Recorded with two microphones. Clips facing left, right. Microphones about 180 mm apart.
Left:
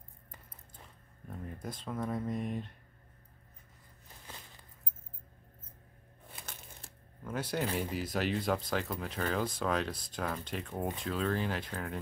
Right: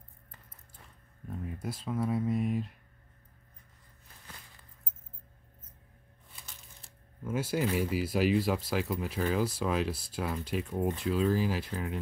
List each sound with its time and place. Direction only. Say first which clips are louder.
1.6 s speech: right 4 dB; 5° right (ahead or behind)
6.3 s a sound: left 5 dB; 60° left (ahead or behind)
7.2 s speech: right 4 dB; 5° right (ahead or behind)